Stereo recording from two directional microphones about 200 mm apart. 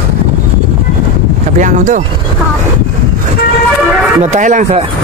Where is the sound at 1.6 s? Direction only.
40° right (ahead or behind).